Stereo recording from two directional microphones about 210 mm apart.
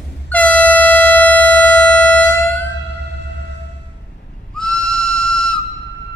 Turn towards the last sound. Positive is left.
turn(degrees=5)  # may be behind; listen again after turning